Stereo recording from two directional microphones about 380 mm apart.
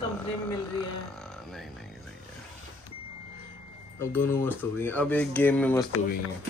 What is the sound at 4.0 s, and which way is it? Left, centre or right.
Speech, centre.